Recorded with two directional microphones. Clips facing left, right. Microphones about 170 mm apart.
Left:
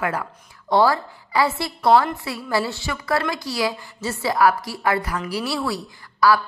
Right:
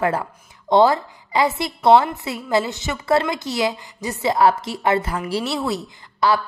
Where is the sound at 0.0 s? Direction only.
30° right (ahead or behind).